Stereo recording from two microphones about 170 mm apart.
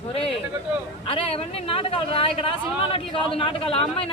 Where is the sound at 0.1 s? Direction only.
35° left (ahead or behind).